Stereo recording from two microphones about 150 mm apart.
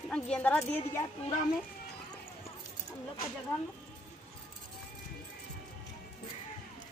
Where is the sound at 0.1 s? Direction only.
10° left (ahead or behind).